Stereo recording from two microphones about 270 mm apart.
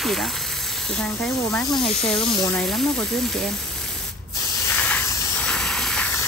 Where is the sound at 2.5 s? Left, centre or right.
Centre.